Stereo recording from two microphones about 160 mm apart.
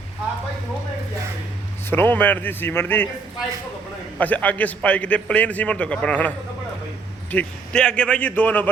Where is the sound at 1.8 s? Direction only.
15° left (ahead or behind).